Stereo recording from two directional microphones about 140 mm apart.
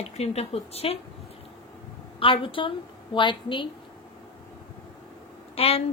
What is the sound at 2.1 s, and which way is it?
A woman's voice, 40° left (ahead or behind).